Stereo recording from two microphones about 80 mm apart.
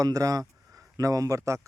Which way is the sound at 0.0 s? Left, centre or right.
Right.